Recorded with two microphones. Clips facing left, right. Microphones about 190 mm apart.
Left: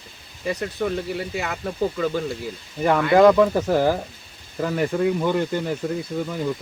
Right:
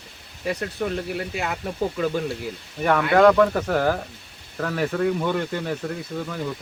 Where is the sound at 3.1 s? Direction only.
10° left (ahead or behind).